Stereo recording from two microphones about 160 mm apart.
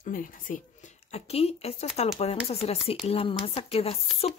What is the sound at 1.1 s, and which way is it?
Speech, 40° left (ahead or behind).